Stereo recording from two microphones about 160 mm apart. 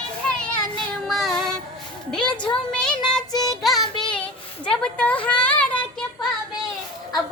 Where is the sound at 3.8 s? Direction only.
30° left (ahead or behind).